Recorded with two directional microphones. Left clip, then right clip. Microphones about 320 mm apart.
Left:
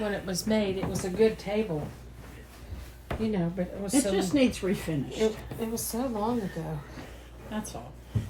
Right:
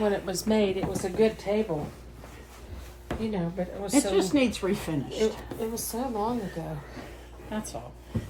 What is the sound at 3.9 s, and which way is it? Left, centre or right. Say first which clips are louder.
Speech: right 3 dB; centre.